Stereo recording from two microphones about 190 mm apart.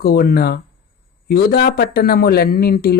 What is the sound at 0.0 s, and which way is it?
A man's voice, 55° left (ahead or behind).